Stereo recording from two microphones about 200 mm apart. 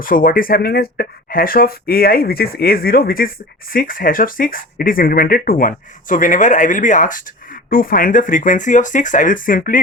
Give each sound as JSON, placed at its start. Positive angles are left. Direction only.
{"t": 0.0, "sound": "speech", "side_deg": 45}